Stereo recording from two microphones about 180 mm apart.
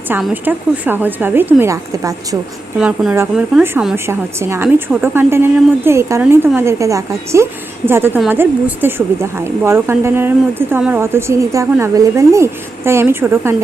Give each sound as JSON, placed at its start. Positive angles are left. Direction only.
{"t": 0.2, "sound": "a woman's voice", "side_deg": -10}
{"t": 2.7, "sound": "a woman's voice", "side_deg": -5}